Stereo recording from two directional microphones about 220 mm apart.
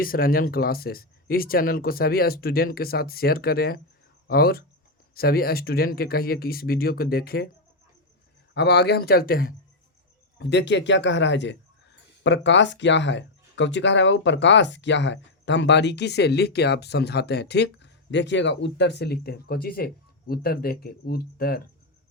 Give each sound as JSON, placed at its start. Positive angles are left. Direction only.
{"t": 0.0, "sound": "a man's voice", "side_deg": 40}
{"t": 8.5, "sound": "a man's voice", "side_deg": 50}